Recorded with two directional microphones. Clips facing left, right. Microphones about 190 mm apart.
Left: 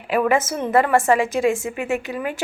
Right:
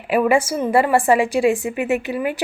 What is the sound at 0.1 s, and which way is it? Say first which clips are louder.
A woman's voice: right 2 dB; 10° right (ahead or behind).